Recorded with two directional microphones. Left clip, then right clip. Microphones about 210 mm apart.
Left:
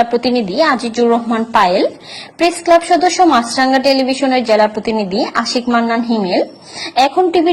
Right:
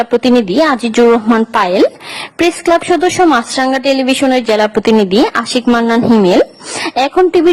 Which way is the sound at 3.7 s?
55° right (ahead or behind).